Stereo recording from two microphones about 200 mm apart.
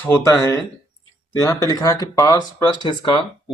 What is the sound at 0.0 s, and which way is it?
Speech, 10° left (ahead or behind).